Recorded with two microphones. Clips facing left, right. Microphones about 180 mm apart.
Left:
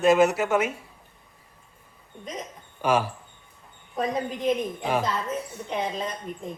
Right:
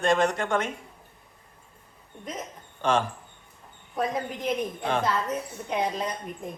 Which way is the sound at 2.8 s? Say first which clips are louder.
Left 1 dB; 10° left (ahead or behind).